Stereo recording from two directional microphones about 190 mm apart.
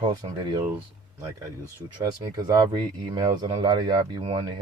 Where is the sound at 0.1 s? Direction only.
20° right (ahead or behind).